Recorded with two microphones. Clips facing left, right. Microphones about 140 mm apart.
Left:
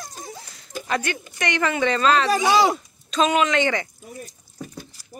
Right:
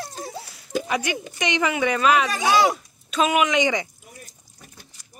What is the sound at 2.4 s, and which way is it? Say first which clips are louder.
Speech: left 1 dB; centre (ahead or behind).